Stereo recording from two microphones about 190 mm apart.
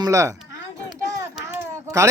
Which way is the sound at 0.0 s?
15° right (ahead or behind).